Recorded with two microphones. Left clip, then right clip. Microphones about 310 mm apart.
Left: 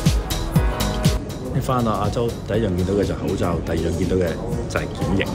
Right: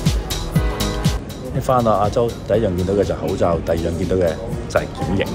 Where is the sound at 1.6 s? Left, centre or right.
Centre.